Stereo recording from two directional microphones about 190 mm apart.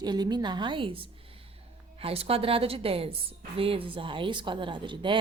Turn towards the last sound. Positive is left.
turn(degrees=-25)  # may be behind; listen again after turning